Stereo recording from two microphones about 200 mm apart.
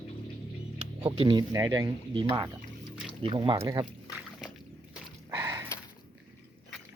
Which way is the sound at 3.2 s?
25° right (ahead or behind).